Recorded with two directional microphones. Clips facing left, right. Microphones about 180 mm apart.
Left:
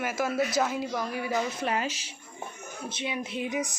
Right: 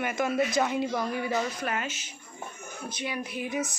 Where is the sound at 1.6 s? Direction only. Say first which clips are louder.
Left 3 dB; 30° left (ahead or behind).